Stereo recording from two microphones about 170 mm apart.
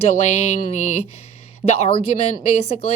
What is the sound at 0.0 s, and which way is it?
Speech, 40° left (ahead or behind).